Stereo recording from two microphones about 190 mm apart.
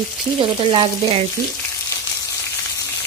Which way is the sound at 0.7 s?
25° right (ahead or behind).